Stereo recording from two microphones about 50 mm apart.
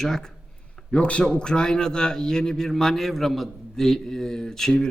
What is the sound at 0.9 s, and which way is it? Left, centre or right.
A man's voice, left.